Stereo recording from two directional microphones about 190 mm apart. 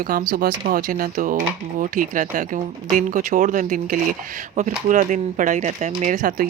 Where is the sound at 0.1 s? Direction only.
45° right (ahead or behind).